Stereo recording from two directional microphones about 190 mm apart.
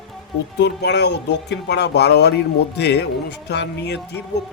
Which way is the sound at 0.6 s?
60° left (ahead or behind).